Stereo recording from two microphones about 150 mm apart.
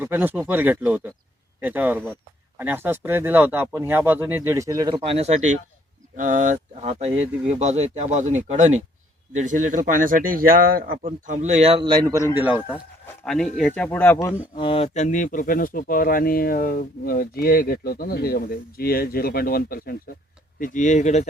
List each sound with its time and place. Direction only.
0.0 s speech: 15° right (ahead or behind)
5.1 s speech: 45° right (ahead or behind)
6.1 s speech: 60° right (ahead or behind)
11.3 s speech: 50° right (ahead or behind)
12.4 s speech: 10° right (ahead or behind)
13.2 s speech: 5° left (ahead or behind)
14.5 s speech: 35° left (ahead or behind)
14.9 s speech: 55° left (ahead or behind); by 20.0 s 80° left
20.6 s speech: 60° left (ahead or behind)